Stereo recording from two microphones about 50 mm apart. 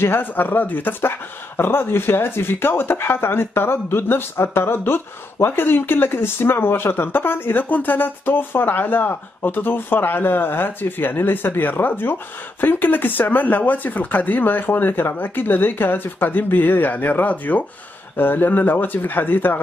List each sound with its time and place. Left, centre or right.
0.0 s speech: left
1.6 s speech: left